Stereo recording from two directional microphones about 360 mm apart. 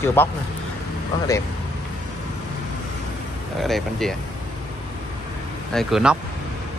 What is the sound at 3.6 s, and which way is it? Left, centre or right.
Speech, centre.